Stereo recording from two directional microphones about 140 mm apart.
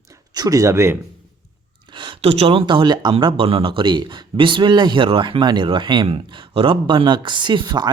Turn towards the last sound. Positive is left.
turn(degrees=-30)  # may be behind; listen again after turning